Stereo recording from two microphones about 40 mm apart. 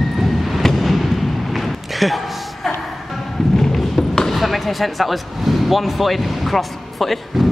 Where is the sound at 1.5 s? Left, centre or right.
Centre.